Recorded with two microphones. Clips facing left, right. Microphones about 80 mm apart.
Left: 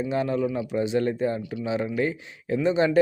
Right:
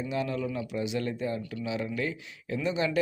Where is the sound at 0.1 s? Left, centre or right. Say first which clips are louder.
Left 5 dB; left.